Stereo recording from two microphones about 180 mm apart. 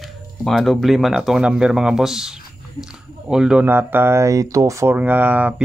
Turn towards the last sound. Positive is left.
turn(degrees=-10)  # may be behind; listen again after turning